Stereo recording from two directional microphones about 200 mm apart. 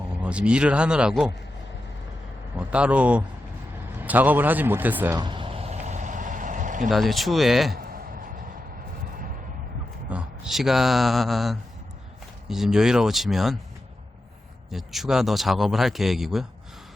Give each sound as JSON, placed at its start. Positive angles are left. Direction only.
{"t": 0.2, "sound": "speech", "side_deg": -5}
{"t": 2.6, "sound": "speech", "side_deg": -5}
{"t": 4.0, "sound": "a sound", "side_deg": -10}
{"t": 6.9, "sound": "speech", "side_deg": 0}
{"t": 7.8, "sound": "a sound", "side_deg": -45}
{"t": 10.1, "sound": "speech", "side_deg": -5}
{"t": 14.7, "sound": "speech", "side_deg": 0}